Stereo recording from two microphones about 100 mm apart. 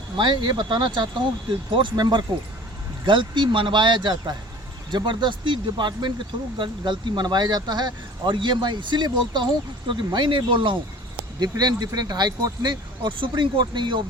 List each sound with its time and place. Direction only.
0.2 s speech: 50° right (ahead or behind)
11.3 s speech: 40° right (ahead or behind)